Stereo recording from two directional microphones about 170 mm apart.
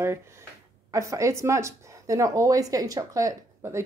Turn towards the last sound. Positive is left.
turn(degrees=-15)  # may be behind; listen again after turning